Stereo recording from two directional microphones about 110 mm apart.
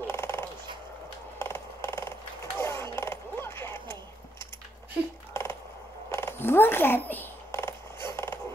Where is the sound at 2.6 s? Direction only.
25° left (ahead or behind).